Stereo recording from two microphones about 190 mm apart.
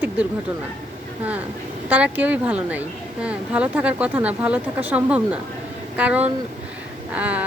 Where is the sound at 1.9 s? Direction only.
10° right (ahead or behind).